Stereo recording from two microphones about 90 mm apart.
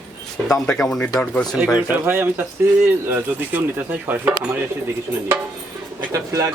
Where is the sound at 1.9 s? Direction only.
25° right (ahead or behind).